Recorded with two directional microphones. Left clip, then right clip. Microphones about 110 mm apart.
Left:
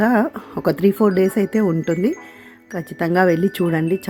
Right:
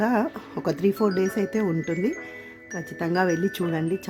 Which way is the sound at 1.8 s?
30° left (ahead or behind).